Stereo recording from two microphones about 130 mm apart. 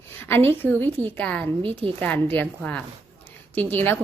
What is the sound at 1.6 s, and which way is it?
Speech, 40° right (ahead or behind).